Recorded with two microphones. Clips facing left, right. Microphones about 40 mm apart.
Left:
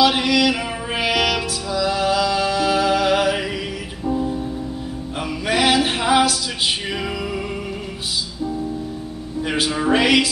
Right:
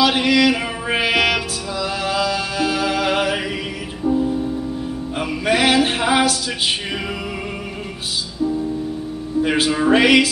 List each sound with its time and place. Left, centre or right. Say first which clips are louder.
0.2 s music: right 2 dB; centre
1.1 s music: right 2 dB; right
1.8 s music: left 2 dB; centre
5.5 s a sound: right 1 dB; centre
9.4 s music: right 4 dB; centre